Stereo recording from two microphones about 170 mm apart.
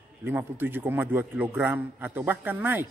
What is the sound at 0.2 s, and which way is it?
A man's voice, 15° right (ahead or behind).